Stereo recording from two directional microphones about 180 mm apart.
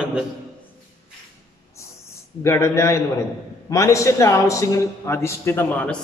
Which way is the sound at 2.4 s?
15° left (ahead or behind).